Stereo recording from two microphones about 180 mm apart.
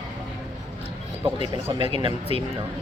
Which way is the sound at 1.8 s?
30° right (ahead or behind).